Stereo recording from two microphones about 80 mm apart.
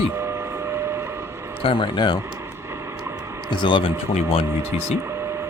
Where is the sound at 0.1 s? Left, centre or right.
Right.